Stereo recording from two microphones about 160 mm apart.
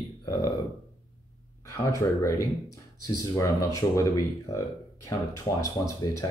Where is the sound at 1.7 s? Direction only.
20° left (ahead or behind).